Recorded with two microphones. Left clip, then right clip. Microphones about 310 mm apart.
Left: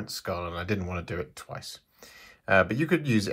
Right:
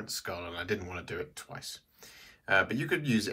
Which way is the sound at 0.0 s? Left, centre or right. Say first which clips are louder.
Left 5 dB; centre.